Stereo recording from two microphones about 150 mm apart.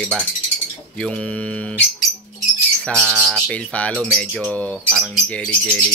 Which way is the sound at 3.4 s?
10° left (ahead or behind).